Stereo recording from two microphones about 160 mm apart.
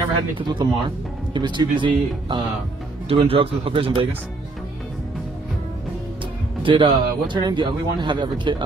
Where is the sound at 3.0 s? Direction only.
35° right (ahead or behind).